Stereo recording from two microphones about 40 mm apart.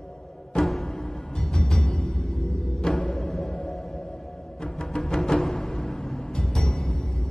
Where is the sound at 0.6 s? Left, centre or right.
Centre.